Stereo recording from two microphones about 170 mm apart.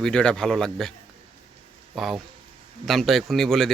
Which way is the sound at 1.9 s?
Centre (ahead or behind).